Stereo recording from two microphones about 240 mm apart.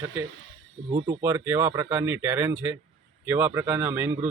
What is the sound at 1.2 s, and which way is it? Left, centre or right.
A man's voice, centre.